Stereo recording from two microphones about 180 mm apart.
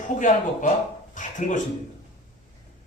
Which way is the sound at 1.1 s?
45° left (ahead or behind).